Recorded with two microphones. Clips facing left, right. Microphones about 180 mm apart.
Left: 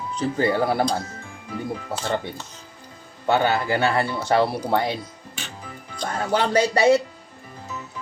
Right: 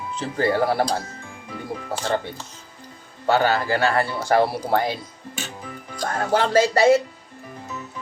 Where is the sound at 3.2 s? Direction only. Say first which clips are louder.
Right 1 dB; 20° left (ahead or behind).